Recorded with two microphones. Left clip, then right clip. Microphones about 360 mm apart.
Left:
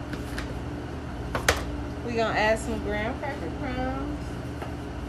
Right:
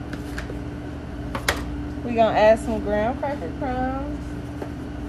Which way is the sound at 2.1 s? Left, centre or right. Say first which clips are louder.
Right 8 dB; centre.